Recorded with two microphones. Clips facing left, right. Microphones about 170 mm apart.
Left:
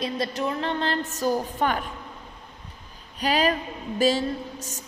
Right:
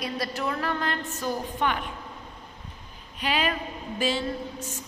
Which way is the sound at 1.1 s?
40° left (ahead or behind).